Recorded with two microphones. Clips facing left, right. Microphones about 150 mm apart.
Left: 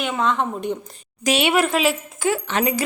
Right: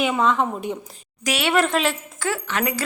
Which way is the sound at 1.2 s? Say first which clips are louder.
Left 4 dB; 20° left (ahead or behind).